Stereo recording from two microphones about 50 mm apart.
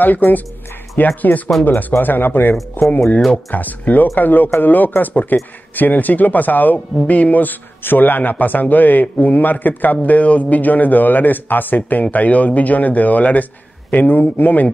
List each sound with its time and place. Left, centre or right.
0.0 s speech: left